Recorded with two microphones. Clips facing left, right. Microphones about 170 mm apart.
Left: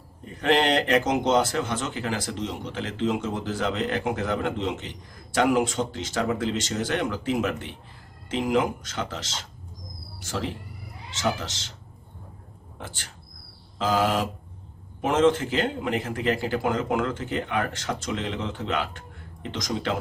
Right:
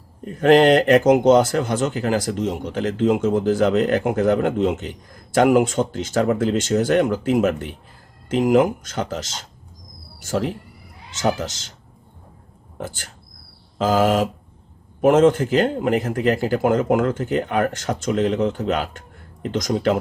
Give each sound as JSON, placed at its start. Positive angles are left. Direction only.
{"t": 0.3, "sound": "speech", "side_deg": -45}
{"t": 12.8, "sound": "speech", "side_deg": -45}